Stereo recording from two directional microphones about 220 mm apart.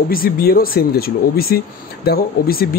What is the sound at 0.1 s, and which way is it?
A man's voice, 40° left (ahead or behind).